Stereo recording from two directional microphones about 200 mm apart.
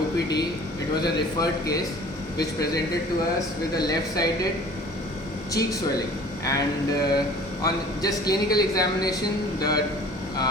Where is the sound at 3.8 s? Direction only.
20° left (ahead or behind).